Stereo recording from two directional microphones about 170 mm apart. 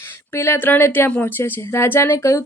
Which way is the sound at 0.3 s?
15° left (ahead or behind).